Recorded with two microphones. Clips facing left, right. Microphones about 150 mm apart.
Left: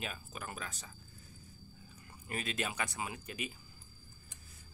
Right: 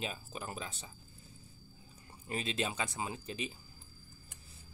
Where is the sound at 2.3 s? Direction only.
25° right (ahead or behind).